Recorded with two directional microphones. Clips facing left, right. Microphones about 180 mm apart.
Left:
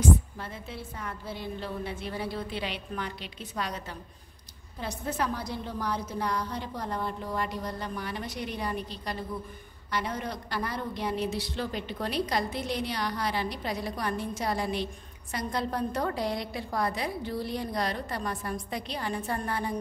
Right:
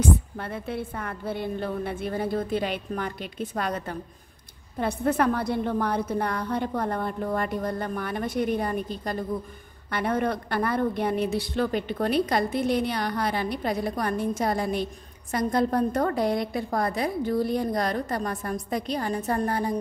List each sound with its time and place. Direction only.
0.4 s a woman's voice: 60° right (ahead or behind); by 19.7 s 40° right (ahead or behind)